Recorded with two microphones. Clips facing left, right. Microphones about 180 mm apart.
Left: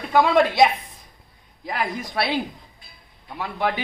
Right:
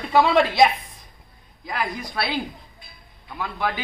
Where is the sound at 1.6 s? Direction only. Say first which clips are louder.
Left 1 dB; 25° left (ahead or behind).